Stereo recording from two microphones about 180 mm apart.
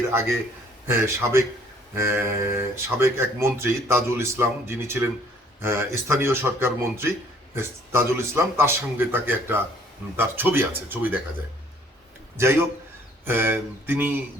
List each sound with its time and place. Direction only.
0.9 s speech: 15° right (ahead or behind)
12.4 s speech: 15° right (ahead or behind)